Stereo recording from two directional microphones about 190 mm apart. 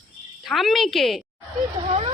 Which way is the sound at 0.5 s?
Centre (ahead or behind).